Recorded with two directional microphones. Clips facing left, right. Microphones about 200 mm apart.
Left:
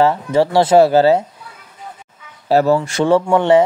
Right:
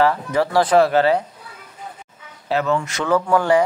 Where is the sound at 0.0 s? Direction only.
25° left (ahead or behind).